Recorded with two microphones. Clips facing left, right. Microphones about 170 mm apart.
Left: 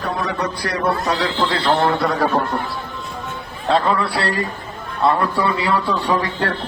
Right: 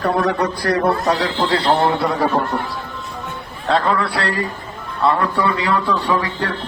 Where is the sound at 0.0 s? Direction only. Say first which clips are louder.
Right 5 dB; 60° right (ahead or behind); by 1.7 s 30° right (ahead or behind).